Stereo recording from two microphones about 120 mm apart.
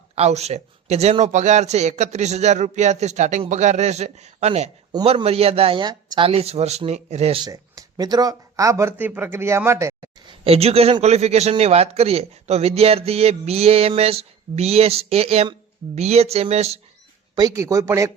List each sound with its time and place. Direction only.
0.2 s a man's voice: 65° right (ahead or behind)
1.2 s a man's voice: 75° right (ahead or behind); by 5.8 s 55° right (ahead or behind)
5.8 s a woman's voice: 35° right (ahead or behind)
6.2 s a man's voice: 60° right (ahead or behind)
7.5 s speech: 30° right (ahead or behind)
9.0 s speech: 15° right (ahead or behind)
10.2 s a man's voice: 55° right (ahead or behind)
17.3 s speech: 30° right (ahead or behind)